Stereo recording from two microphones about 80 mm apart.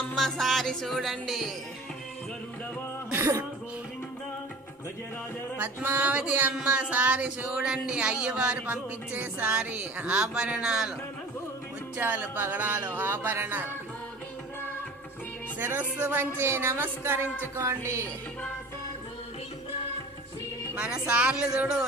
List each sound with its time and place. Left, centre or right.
0.2 s music: centre
3.1 s speech: right
5.5 s music: right
6.7 s speech: centre
11.9 s music: right
15.5 s music: right
17.6 s a woman's voice: right
21.1 s speech: centre